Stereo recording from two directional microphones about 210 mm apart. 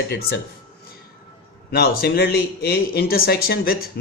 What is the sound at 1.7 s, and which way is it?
Speech, 45° left (ahead or behind).